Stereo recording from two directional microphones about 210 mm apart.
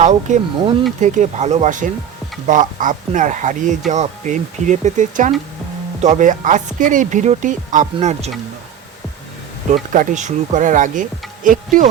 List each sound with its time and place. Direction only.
0.0 s speech: 35° right (ahead or behind)
9.7 s speech: 35° right (ahead or behind)